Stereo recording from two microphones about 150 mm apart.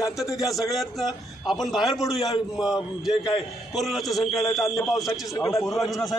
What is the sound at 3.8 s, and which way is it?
A man's voice, centre (ahead or behind).